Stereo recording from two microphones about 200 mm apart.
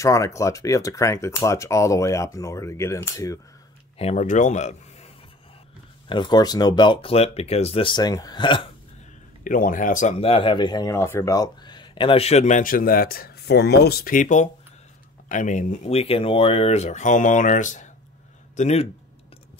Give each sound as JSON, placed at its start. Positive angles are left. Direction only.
{"t": 0.0, "sound": "speech", "side_deg": 15}
{"t": 4.0, "sound": "a man's voice", "side_deg": 35}
{"t": 6.0, "sound": "speech", "side_deg": 25}
{"t": 9.4, "sound": "speech", "side_deg": 40}